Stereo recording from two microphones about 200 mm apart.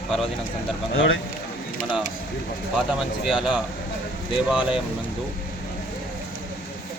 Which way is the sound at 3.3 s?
5° right (ahead or behind).